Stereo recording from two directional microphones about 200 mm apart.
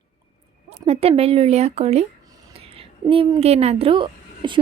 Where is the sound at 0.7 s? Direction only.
30° right (ahead or behind).